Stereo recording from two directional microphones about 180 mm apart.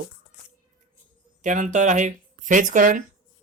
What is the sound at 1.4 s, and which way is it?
Speech, 45° right (ahead or behind).